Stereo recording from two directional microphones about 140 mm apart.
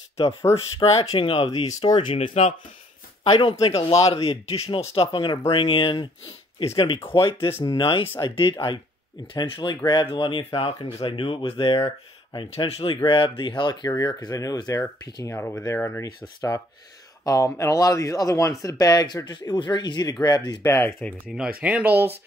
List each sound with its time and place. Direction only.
0.8 s speech: 45° left (ahead or behind)
1.7 s speech: 25° left (ahead or behind)
2.1 s speech: 50° left (ahead or behind)
3.3 s speech: 40° left (ahead or behind)
3.5 s speech: 25° left (ahead or behind)
3.8 s speech: 40° left (ahead or behind)
11.8 s speech: 25° left (ahead or behind)
12.4 s speech: 45° left (ahead or behind); by 14.8 s 25° left (ahead or behind)
15.2 s speech: 15° left (ahead or behind)
20.7 s speech: 15° left (ahead or behind)
21.5 s speech: 10° right (ahead or behind)